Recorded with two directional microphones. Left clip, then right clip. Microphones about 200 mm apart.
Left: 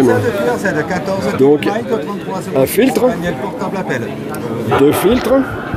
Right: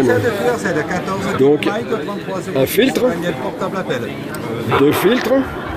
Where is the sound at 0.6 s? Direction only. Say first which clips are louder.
Left 2 dB; 50° left (ahead or behind).